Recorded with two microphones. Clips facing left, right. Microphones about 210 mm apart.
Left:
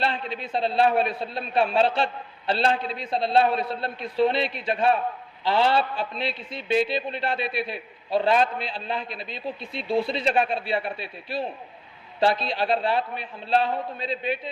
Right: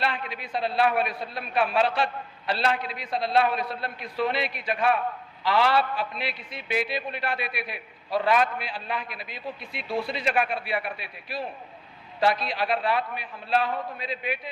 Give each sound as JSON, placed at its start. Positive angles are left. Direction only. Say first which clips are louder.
{"t": 0.0, "sound": "a man's voice", "louder": "left 2 dB", "side_deg": 30}